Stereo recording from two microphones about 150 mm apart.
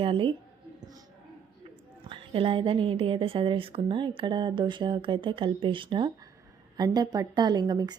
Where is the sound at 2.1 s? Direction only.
35° right (ahead or behind).